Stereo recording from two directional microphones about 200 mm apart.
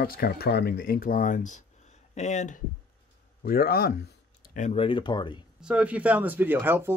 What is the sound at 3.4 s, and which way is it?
Speech, 45° left (ahead or behind).